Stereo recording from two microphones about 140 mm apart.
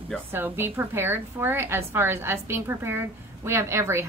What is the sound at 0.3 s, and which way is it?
A woman's voice, 15° right (ahead or behind).